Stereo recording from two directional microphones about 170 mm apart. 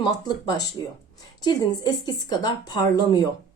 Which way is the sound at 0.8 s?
25° left (ahead or behind).